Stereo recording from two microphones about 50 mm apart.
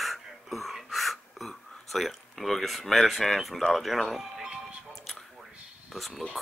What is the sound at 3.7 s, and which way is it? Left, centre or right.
Speech, centre.